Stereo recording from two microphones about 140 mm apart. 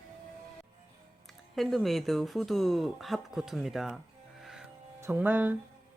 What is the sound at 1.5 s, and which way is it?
Speech, centre (ahead or behind).